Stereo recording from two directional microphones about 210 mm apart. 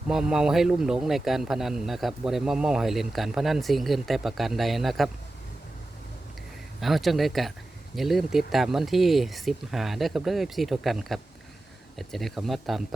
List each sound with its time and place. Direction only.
0.1 s a man's voice: 5° right (ahead or behind)
6.7 s a man's voice: centre (ahead or behind)